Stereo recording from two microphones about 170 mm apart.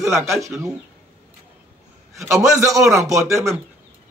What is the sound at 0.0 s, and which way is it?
Speech, 15° right (ahead or behind).